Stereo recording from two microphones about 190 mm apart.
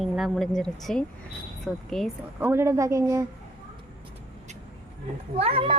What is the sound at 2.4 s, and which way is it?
Speech, 15° right (ahead or behind).